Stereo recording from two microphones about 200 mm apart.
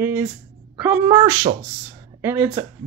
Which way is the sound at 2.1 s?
10° right (ahead or behind).